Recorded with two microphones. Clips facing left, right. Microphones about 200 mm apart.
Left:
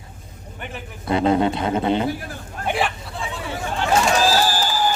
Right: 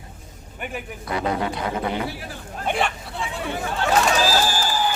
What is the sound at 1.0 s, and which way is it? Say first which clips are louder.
A man's voice: left 7 dB; 25° left (ahead or behind).